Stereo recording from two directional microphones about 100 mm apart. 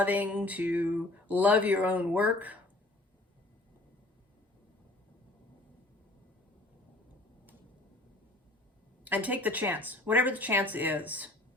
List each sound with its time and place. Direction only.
0.0 s speech: 15° right (ahead or behind)
9.0 s speech: 15° right (ahead or behind)